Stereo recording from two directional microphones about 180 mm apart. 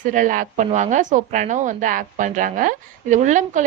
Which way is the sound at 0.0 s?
45° right (ahead or behind).